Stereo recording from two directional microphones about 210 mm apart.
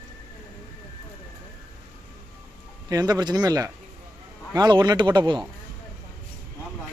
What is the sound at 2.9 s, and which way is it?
Speech, 20° right (ahead or behind).